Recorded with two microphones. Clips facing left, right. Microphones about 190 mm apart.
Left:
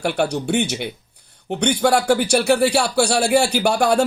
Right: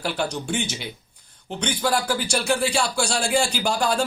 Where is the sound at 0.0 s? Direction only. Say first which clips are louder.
Left 6 dB; 65° left (ahead or behind).